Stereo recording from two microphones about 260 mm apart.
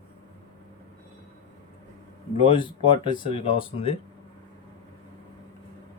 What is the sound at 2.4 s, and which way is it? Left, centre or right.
Speech, centre.